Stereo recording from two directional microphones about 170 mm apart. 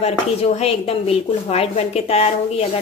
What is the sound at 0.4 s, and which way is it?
A woman's voice, 35° left (ahead or behind).